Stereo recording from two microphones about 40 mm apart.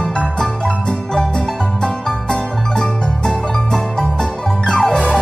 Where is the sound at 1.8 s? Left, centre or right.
Centre.